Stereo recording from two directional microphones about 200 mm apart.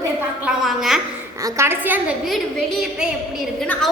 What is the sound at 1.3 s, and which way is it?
A woman's voice, 15° right (ahead or behind).